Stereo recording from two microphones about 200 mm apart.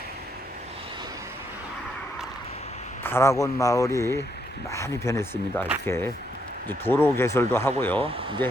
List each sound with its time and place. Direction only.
3.0 s speech: 10° left (ahead or behind)
8.0 s speech: 25° right (ahead or behind)